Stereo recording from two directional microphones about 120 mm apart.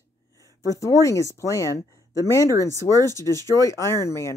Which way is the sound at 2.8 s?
25° right (ahead or behind).